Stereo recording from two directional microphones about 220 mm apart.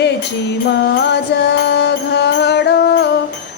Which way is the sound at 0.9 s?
50° left (ahead or behind).